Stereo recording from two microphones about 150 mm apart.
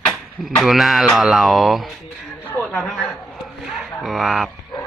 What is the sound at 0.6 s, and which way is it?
Speech, centre (ahead or behind).